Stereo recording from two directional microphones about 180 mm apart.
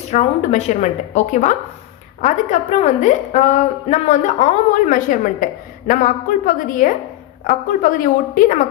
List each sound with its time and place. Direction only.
0.1 s a woman's voice: 40° left (ahead or behind)